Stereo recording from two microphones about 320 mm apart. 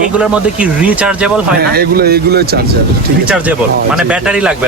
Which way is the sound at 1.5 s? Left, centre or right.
Right.